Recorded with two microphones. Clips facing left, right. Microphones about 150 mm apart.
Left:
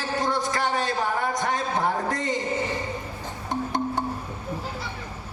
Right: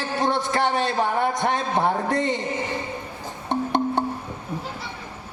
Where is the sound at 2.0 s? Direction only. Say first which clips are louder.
Right 5 dB; 25° right (ahead or behind).